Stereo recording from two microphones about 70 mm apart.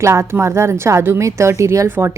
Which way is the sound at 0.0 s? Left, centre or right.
Right.